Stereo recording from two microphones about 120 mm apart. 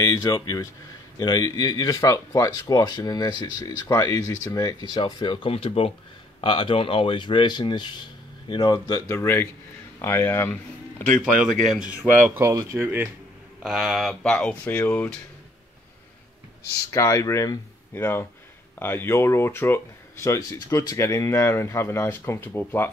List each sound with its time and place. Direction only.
0.0 s speech: 30° left (ahead or behind)
11.5 s speech: 90° right
12.1 s speech: 20° right (ahead or behind)
13.6 s speech: centre (ahead or behind)
16.9 s speech: 25° left (ahead or behind)